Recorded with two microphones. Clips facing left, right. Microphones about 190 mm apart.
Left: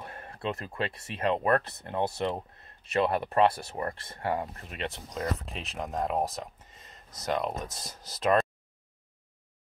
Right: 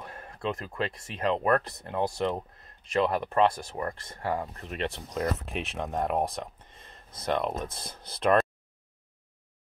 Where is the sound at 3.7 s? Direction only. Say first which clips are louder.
Even; 20° left (ahead or behind).